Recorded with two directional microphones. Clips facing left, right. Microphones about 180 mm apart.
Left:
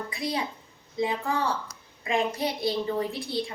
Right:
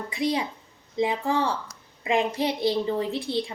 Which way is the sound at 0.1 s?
20° right (ahead or behind).